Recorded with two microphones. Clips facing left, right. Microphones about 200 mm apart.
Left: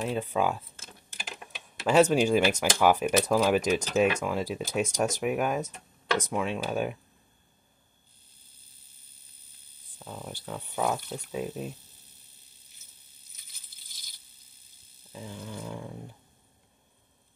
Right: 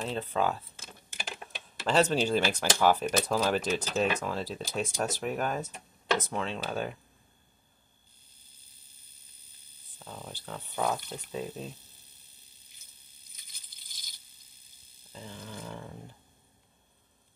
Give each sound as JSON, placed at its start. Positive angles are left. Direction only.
{"t": 0.0, "sound": "speech", "side_deg": 10}
{"t": 1.9, "sound": "speech", "side_deg": 10}
{"t": 9.9, "sound": "speech", "side_deg": 10}
{"t": 13.4, "sound": "a sound", "side_deg": 5}
{"t": 15.1, "sound": "dog", "side_deg": 10}